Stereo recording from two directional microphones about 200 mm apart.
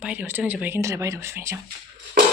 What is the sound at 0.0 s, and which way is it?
Speech, 5° right (ahead or behind).